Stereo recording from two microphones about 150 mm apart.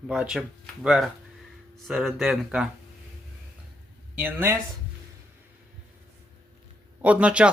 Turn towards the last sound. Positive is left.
turn(degrees=-10)  # may be behind; listen again after turning